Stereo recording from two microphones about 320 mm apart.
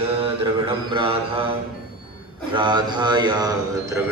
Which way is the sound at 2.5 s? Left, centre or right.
Centre.